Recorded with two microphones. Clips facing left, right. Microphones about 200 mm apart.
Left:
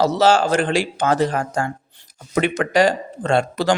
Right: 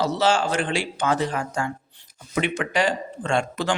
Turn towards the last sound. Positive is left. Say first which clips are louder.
# left 5 dB
turn(degrees=35)  # may be behind; listen again after turning